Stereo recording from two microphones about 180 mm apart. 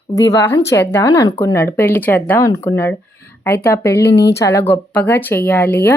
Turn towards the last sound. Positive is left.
turn(degrees=10)  # may be behind; listen again after turning